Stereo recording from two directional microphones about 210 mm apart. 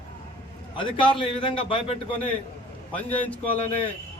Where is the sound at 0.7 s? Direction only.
25° left (ahead or behind).